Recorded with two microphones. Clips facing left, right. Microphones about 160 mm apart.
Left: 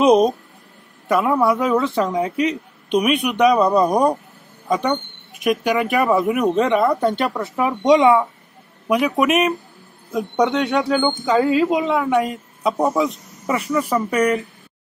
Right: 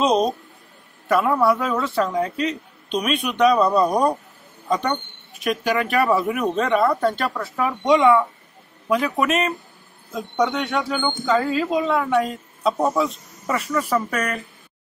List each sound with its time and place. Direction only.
0.0 s speech: 15° left (ahead or behind)
5.4 s speech: 15° left (ahead or behind)